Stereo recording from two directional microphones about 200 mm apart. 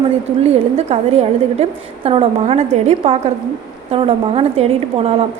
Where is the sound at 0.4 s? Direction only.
30° right (ahead or behind).